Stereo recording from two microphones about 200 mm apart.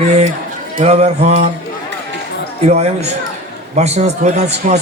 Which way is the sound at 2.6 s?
35° right (ahead or behind).